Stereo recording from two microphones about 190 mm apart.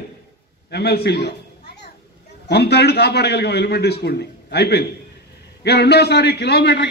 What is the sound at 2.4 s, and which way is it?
A man's voice, 60° left (ahead or behind).